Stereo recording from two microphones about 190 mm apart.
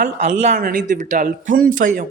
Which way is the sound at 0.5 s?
50° right (ahead or behind).